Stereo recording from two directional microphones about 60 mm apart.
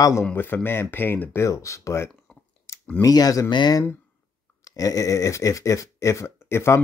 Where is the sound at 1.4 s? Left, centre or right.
Left.